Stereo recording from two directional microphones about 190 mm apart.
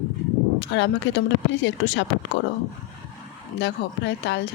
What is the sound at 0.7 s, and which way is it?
Speech, 70° left (ahead or behind).